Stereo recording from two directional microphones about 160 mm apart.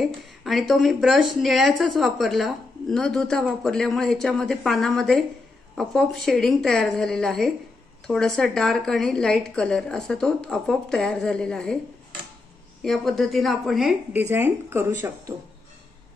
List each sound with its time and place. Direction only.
0.4 s a woman's voice: centre (ahead or behind)
12.8 s a woman's voice: centre (ahead or behind)
14.2 s speech: 15° right (ahead or behind)